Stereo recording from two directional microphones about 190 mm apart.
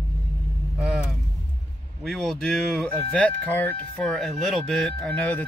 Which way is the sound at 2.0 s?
5° left (ahead or behind).